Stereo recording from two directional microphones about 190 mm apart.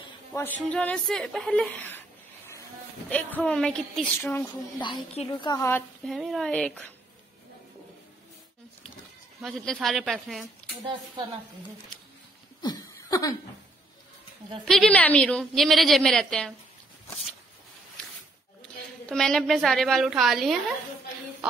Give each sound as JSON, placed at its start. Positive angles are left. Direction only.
{"t": 0.3, "sound": "a woman's voice", "side_deg": 15}
{"t": 4.8, "sound": "a woman's voice", "side_deg": 30}
{"t": 5.4, "sound": "a woman's voice", "side_deg": 20}
{"t": 9.4, "sound": "a woman's voice", "side_deg": 0}
{"t": 10.4, "sound": "a woman's voice", "side_deg": -20}
{"t": 12.6, "sound": "a sound", "side_deg": 20}
{"t": 14.6, "sound": "a woman's voice", "side_deg": 0}
{"t": 19.0, "sound": "a woman's voice", "side_deg": 5}